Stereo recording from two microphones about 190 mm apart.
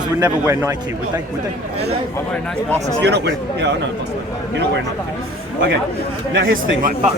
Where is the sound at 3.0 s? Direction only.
65° right (ahead or behind).